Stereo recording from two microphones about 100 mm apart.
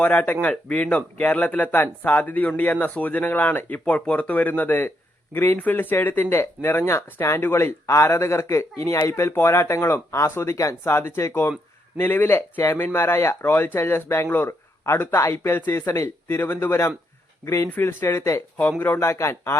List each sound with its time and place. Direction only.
0.0 s speech: 15° left (ahead or behind)